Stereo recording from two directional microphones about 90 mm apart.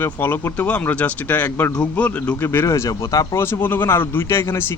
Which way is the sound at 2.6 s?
35° left (ahead or behind).